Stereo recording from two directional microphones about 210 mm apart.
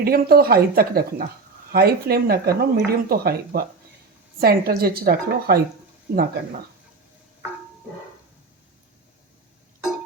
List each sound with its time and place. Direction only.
0.0 s speech: 45° right (ahead or behind)